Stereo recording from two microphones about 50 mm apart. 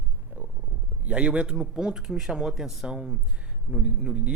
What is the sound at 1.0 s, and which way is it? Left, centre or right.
Speech, right.